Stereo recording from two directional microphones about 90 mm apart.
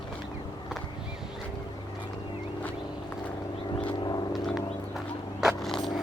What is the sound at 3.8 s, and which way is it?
Vehicle, 65° left (ahead or behind).